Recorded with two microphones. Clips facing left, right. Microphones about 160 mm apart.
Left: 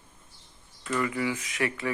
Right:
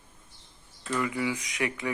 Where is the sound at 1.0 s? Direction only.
15° right (ahead or behind).